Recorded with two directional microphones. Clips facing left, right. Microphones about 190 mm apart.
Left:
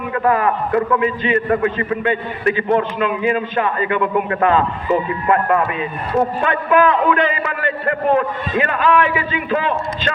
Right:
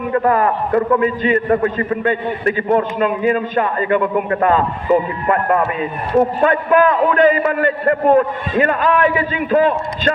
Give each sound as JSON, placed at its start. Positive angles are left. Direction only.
{"t": 0.1, "sound": "a man's voice", "side_deg": -35}